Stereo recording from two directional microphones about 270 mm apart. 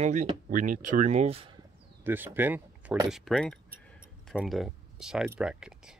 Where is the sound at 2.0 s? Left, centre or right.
Centre.